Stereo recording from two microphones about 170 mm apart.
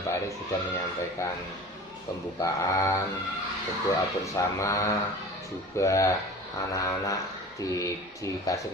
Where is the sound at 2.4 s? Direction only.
20° left (ahead or behind).